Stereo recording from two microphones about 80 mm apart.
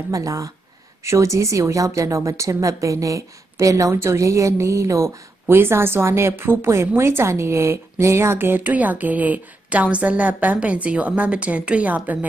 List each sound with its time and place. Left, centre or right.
0.1 s a woman's voice: right; by 12.3 s centre